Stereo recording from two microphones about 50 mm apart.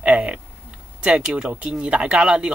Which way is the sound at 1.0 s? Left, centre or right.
Right.